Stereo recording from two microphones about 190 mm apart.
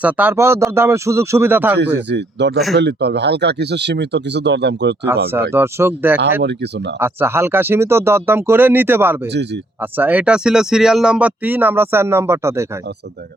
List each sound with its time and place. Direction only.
0.0 s speech: 10° right (ahead or behind)
2.0 s speech: 65° right (ahead or behind)
5.5 s speech: 10° right (ahead or behind)
6.4 s speech: 65° right (ahead or behind)
7.0 s speech: 10° right (ahead or behind)